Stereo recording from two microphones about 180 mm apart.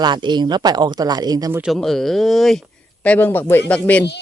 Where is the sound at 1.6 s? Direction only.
Centre (ahead or behind).